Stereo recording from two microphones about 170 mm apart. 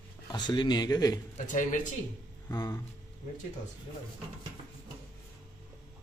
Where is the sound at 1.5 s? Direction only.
50° left (ahead or behind).